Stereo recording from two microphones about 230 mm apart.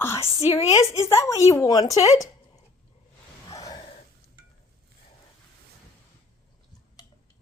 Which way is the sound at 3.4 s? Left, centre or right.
Centre.